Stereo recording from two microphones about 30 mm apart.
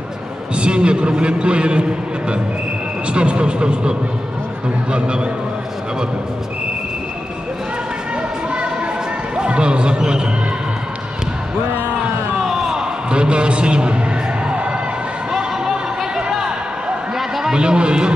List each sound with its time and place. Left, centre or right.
0.6 s a man's voice: right
4.9 s a man's voice: right
9.4 s a man's voice: right
12.4 s a sound: centre
13.1 s a sound: right
17.6 s a man's voice: right